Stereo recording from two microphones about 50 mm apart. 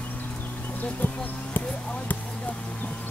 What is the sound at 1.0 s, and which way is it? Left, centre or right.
Speech, left.